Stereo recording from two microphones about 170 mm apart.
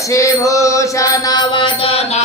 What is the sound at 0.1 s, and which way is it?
Mantra, 20° left (ahead or behind).